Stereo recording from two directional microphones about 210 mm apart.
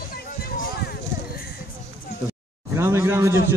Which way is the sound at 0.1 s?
45° left (ahead or behind).